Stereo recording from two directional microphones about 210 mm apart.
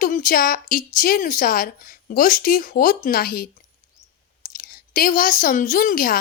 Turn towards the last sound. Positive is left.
turn(degrees=40)  # may be behind; listen again after turning